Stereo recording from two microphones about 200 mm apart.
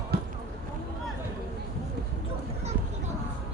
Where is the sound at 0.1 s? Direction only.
50° right (ahead or behind).